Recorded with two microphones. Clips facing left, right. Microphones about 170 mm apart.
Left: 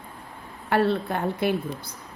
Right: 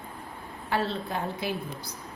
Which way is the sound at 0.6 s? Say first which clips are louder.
Left 7 dB; 60° left (ahead or behind).